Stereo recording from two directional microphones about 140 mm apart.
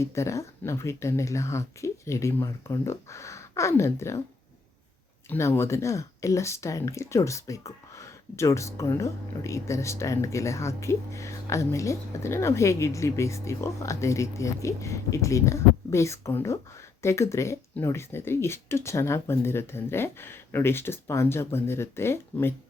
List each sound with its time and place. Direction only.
0.0 s speech: 20° left (ahead or behind)
5.3 s speech: 20° left (ahead or behind)